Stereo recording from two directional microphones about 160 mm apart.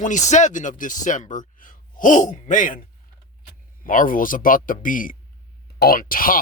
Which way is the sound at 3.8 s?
60° left (ahead or behind).